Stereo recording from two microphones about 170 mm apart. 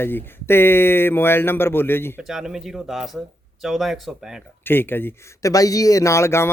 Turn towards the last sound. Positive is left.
turn(degrees=15)  # may be behind; listen again after turning